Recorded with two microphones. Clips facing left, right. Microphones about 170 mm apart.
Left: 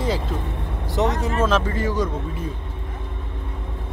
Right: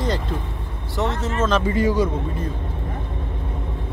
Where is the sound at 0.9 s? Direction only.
15° left (ahead or behind).